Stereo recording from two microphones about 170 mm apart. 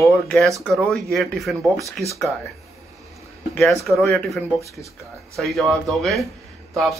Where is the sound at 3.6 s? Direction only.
Centre (ahead or behind).